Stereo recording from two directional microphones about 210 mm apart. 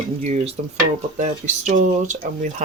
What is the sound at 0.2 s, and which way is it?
Speech, 30° right (ahead or behind).